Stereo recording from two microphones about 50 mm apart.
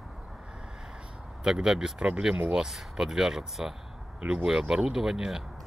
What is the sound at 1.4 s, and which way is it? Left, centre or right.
Speech, centre.